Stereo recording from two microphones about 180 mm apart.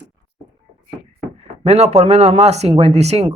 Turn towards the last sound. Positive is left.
turn(degrees=-35)  # may be behind; listen again after turning